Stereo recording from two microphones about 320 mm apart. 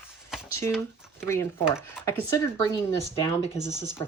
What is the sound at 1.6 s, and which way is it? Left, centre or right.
Speech, centre.